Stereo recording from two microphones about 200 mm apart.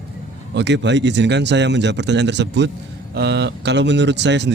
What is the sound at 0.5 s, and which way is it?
A man's voice, 60° right (ahead or behind).